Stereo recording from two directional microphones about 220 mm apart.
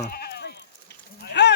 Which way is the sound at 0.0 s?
45° left (ahead or behind).